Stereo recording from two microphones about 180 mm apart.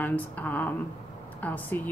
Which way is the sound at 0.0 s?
10° left (ahead or behind).